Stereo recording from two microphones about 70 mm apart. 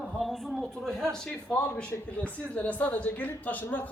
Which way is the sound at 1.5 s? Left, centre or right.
Centre.